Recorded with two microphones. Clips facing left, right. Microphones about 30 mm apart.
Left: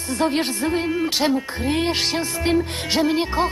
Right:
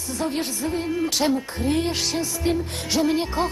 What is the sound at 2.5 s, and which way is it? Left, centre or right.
Music, left.